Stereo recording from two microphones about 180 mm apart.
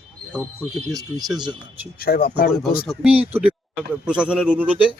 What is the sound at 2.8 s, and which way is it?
Speech, 5° right (ahead or behind).